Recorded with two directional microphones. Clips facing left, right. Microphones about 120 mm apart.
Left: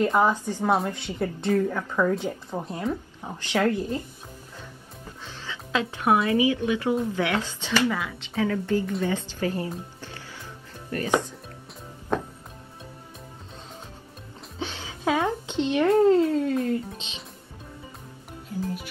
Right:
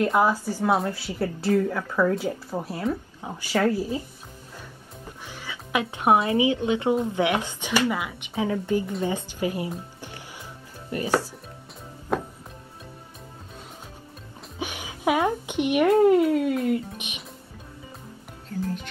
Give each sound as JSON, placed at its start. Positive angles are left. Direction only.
{"t": 0.0, "sound": "speech", "side_deg": -5}
{"t": 5.2, "sound": "a woman's voice", "side_deg": -15}
{"t": 12.1, "sound": "music", "side_deg": -5}
{"t": 14.6, "sound": "a sound", "side_deg": -15}
{"t": 16.6, "sound": "music", "side_deg": -15}
{"t": 18.5, "sound": "music", "side_deg": 15}